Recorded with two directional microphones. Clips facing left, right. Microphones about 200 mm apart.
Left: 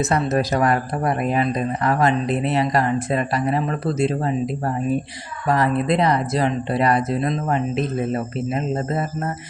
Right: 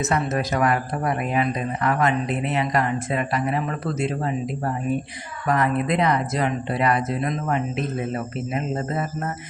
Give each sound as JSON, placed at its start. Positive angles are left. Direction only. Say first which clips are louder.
{"t": 0.0, "sound": "speech", "louder": "left 3 dB", "side_deg": 35}